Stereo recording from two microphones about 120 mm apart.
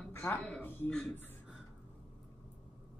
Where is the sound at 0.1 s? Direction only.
15° left (ahead or behind).